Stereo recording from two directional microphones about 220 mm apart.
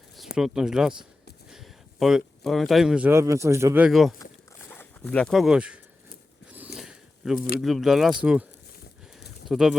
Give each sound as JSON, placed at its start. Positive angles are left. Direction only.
{"t": 0.3, "sound": "speech", "side_deg": -5}
{"t": 6.7, "sound": "biting", "side_deg": 0}
{"t": 7.3, "sound": "speech", "side_deg": 40}
{"t": 7.6, "sound": "speech", "side_deg": 0}
{"t": 9.5, "sound": "speech", "side_deg": 0}